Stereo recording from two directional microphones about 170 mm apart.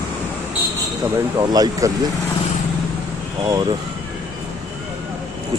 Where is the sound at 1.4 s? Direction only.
20° right (ahead or behind).